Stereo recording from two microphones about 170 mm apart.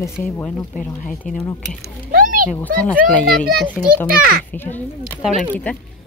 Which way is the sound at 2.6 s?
10° left (ahead or behind).